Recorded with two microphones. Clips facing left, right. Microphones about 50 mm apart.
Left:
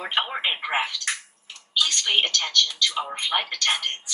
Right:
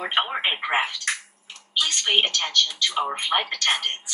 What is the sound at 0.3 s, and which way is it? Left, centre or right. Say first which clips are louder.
Speech: right 2 dB; right.